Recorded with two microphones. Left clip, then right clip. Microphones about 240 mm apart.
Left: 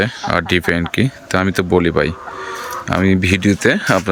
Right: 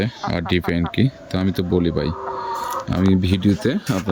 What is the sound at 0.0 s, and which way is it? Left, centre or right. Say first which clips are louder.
Speech: left 7 dB; centre.